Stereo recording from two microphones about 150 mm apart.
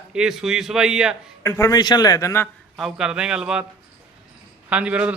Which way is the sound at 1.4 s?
20° left (ahead or behind).